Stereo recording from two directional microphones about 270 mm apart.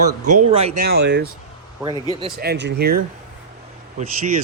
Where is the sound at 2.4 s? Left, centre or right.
Right.